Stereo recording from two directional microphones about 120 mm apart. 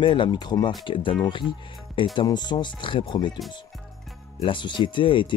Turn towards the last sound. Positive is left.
turn(degrees=45)  # may be behind; listen again after turning